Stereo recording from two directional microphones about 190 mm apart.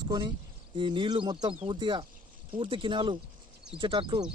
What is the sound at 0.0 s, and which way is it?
Speech, 20° right (ahead or behind).